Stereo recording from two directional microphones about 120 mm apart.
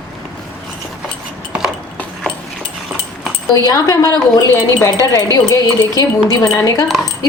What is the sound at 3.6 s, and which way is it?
A woman's voice, 30° left (ahead or behind).